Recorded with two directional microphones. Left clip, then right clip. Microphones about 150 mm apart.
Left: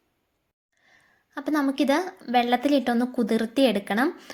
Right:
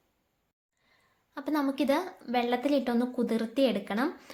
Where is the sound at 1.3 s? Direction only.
25° left (ahead or behind).